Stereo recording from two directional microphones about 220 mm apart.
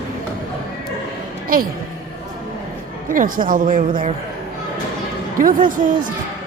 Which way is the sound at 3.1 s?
40° right (ahead or behind).